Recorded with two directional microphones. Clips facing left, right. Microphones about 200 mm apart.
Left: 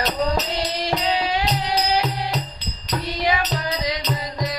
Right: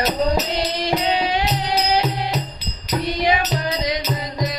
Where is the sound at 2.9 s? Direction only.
20° right (ahead or behind).